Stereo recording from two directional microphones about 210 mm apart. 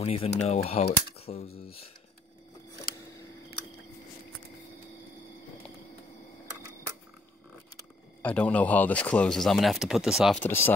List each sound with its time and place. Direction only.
0.0 s speech: 30° left (ahead or behind)
2.9 s camera: 40° left (ahead or behind)
7.7 s speech: 5° left (ahead or behind)
10.4 s speech: 10° left (ahead or behind)